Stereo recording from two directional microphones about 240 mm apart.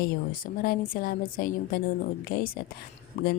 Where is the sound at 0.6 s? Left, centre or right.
Left.